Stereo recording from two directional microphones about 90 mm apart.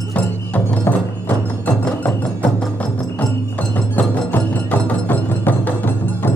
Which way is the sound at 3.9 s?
20° left (ahead or behind).